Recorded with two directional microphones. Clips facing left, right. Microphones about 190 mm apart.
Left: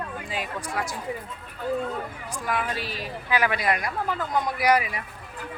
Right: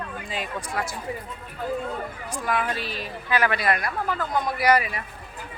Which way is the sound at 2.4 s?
10° left (ahead or behind).